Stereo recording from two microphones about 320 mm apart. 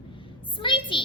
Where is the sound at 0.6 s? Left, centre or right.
Centre.